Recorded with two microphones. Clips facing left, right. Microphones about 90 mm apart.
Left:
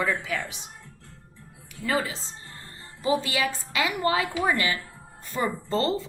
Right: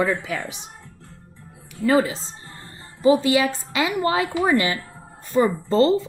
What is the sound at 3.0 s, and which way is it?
A woman's voice, 25° right (ahead or behind).